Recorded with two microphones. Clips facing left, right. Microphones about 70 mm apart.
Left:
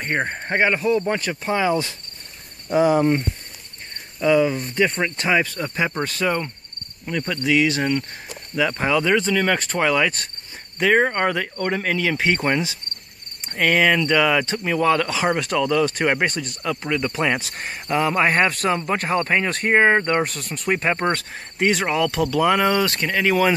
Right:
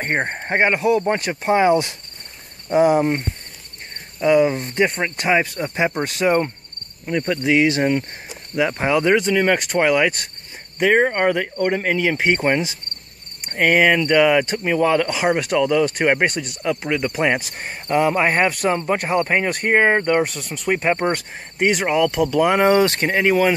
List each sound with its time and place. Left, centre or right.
0.0 s speech: right
0.7 s cricket: centre
1.7 s speech: right
2.9 s cricket: centre
4.2 s speech: centre
7.1 s cricket: centre
20.2 s speech: centre
21.0 s cricket: centre
22.0 s speech: centre
22.5 s speech: right